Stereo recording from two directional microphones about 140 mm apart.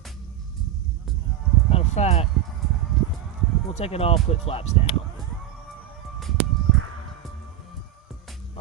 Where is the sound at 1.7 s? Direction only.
45° left (ahead or behind).